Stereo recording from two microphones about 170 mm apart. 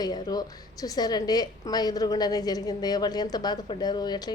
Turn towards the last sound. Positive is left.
turn(degrees=25)  # may be behind; listen again after turning